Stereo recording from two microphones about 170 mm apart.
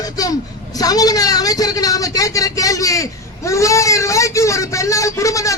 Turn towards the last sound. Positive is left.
turn(degrees=20)  # may be behind; listen again after turning